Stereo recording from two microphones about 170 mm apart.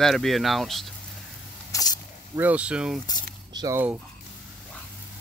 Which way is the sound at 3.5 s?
20° right (ahead or behind).